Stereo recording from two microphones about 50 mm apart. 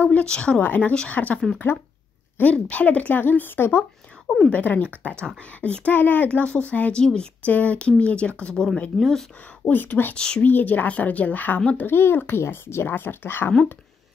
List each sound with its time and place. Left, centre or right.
0.0 s a sound: left
0.3 s speech: left
0.6 s speech: left
2.4 s speech: left
3.2 s a child's voice: left
4.5 s speech: left
7.0 s speech: centre
7.4 s speech: left
8.9 s speech: centre
9.7 s speech: left
10.1 s speech: centre
10.4 s a child's voice: left